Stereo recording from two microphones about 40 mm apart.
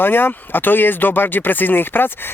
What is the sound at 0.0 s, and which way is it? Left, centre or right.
Speech, left.